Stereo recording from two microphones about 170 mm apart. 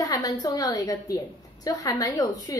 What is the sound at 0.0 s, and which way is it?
A woman's voice, 20° left (ahead or behind).